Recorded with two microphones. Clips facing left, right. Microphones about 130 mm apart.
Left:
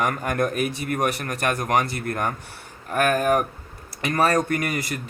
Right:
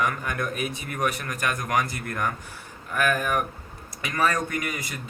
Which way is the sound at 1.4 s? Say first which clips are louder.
Left 4 dB; 35° left (ahead or behind).